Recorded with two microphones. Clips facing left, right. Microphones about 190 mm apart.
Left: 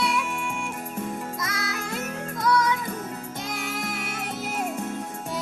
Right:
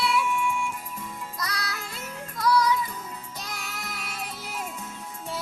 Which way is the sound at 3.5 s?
50° left (ahead or behind).